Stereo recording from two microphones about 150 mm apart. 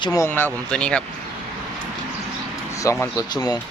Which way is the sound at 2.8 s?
15° left (ahead or behind).